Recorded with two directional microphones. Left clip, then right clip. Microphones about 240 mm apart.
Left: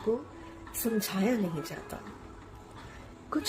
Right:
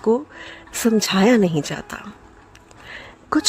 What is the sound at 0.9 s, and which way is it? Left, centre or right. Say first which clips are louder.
Speech: right 15 dB; right.